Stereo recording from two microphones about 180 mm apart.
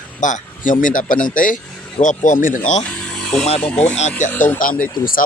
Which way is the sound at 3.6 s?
5° left (ahead or behind).